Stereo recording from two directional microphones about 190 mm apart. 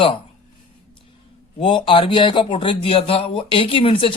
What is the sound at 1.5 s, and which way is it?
Speech, 25° left (ahead or behind).